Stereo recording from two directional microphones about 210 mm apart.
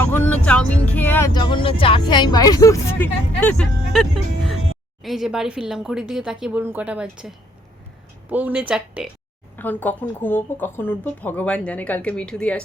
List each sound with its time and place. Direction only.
0.0 s vehicle: 5° left (ahead or behind)
1.3 s speech: 20° left (ahead or behind); by 9.0 s 5° right (ahead or behind)
9.6 s speech: 10° left (ahead or behind)